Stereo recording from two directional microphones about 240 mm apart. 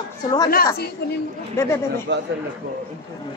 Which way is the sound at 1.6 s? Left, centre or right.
Centre.